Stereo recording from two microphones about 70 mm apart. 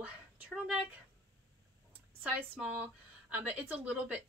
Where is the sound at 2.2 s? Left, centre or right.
Right.